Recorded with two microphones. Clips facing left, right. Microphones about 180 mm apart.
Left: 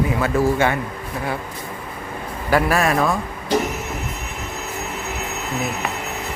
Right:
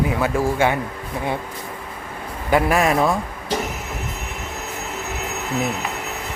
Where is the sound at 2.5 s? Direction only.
20° right (ahead or behind).